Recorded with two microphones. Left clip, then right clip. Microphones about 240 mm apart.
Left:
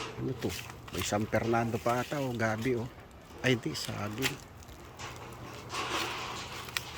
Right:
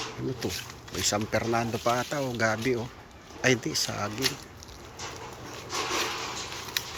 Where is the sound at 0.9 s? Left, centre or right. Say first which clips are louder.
Right 4 dB; centre.